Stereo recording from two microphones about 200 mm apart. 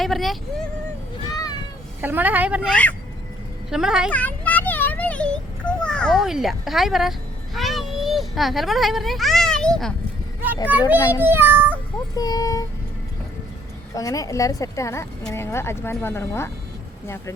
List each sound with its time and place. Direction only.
0.0 s speech: centre (ahead or behind)
1.3 s cat: 20° left (ahead or behind)
2.0 s a woman's voice: 10° right (ahead or behind)
2.6 s speech: 5° left (ahead or behind)
4.1 s a sound: 5° left (ahead or behind)
10.7 s a woman's voice: 10° right (ahead or behind)
11.2 s child singing: 10° right (ahead or behind)
12.1 s speech: 20° left (ahead or behind)
13.9 s speech: 15° left (ahead or behind)